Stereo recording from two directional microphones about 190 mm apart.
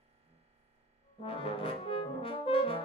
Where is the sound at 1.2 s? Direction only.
30° left (ahead or behind).